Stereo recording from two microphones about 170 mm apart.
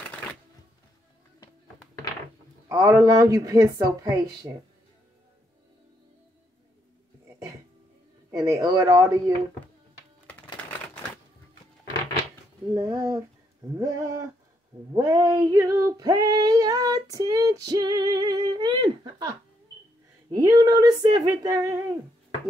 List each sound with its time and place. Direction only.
2.7 s female singing: 20° right (ahead or behind)
8.3 s female singing: 20° right (ahead or behind)
12.7 s female singing: 20° right (ahead or behind)
20.3 s female singing: 20° right (ahead or behind)